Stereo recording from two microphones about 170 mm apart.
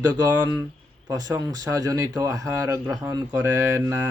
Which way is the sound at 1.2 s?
20° right (ahead or behind).